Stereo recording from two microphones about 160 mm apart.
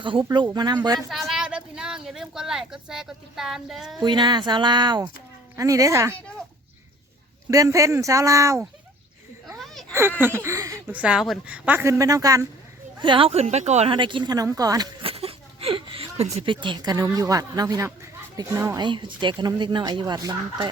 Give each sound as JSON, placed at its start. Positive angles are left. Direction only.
{"t": 0.0, "sound": "speech", "side_deg": -30}
{"t": 1.1, "sound": "speech", "side_deg": 0}
{"t": 4.0, "sound": "speech", "side_deg": -30}
{"t": 7.5, "sound": "speech", "side_deg": -20}
{"t": 10.2, "sound": "a woman's voice", "side_deg": -15}
{"t": 13.0, "sound": "speech", "side_deg": -30}
{"t": 13.9, "sound": "speech", "side_deg": -30}
{"t": 15.0, "sound": "a sound", "side_deg": -35}
{"t": 16.6, "sound": "a woman's voice", "side_deg": -25}
{"t": 18.8, "sound": "speech", "side_deg": -30}